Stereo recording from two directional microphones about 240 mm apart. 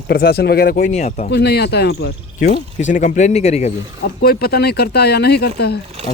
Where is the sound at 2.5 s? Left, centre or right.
Left.